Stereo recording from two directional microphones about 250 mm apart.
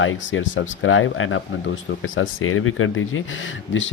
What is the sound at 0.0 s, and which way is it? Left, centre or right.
Speech, left.